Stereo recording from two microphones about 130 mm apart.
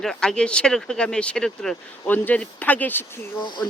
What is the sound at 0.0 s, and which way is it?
Speech, 5° left (ahead or behind).